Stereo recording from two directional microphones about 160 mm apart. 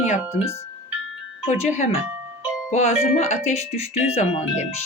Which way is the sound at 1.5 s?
45° left (ahead or behind).